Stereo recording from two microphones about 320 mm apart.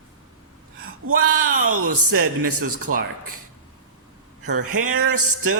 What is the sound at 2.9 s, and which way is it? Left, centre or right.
Speech, right.